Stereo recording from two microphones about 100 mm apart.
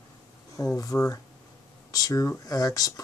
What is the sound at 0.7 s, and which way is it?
Speech, 30° left (ahead or behind).